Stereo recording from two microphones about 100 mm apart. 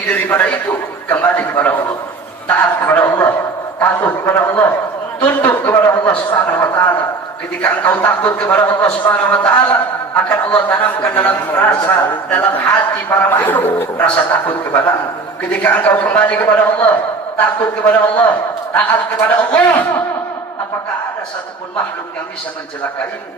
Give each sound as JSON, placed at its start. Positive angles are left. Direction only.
{"t": 0.1, "sound": "a man's voice", "side_deg": 15}
{"t": 3.0, "sound": "a sound", "side_deg": 25}
{"t": 5.7, "sound": "a man's voice", "side_deg": 20}